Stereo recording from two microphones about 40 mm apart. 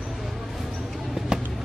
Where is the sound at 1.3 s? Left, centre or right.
Centre.